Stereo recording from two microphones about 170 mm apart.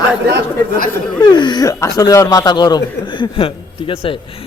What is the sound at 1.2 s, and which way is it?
Speech, 25° left (ahead or behind).